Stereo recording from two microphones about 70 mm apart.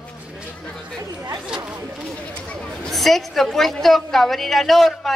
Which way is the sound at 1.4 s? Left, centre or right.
Centre.